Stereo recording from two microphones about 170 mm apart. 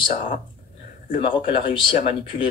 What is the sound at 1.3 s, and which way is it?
Speech, 30° left (ahead or behind).